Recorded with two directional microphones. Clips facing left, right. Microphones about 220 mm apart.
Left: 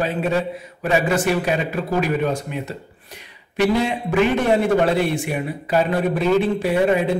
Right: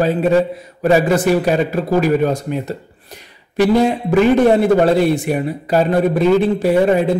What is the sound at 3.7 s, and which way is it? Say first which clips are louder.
A man's voice: right 6 dB; 40° right (ahead or behind).